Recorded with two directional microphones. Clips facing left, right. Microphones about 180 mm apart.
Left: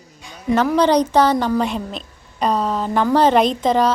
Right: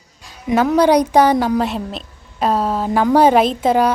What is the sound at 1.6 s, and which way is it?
A woman's voice, centre (ahead or behind).